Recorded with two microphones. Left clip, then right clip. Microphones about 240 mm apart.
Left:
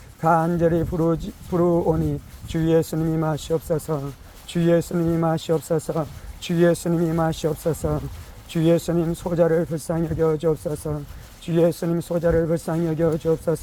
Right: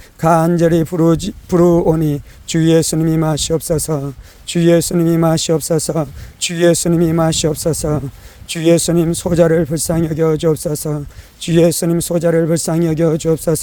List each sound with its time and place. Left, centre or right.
0.2 s speech: right